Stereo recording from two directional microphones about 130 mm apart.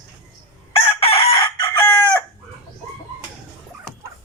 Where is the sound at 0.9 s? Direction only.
45° left (ahead or behind).